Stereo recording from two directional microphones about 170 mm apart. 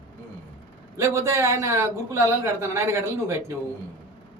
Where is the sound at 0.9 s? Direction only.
15° right (ahead or behind).